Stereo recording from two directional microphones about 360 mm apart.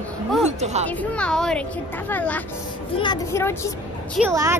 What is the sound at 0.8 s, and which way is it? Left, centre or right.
A child's voice, centre.